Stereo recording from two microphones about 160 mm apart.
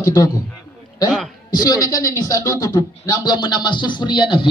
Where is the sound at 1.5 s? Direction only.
25° left (ahead or behind).